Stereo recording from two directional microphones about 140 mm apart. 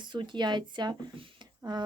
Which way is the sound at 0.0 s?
35° right (ahead or behind).